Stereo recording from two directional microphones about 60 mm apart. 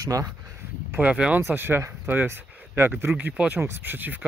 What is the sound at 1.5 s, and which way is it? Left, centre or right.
Speech, right.